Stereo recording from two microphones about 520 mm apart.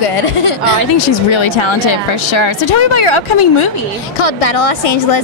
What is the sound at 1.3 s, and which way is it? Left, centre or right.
Speech, left.